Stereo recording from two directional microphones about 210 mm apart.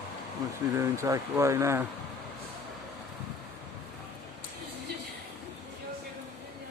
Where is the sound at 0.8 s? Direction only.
15° right (ahead or behind).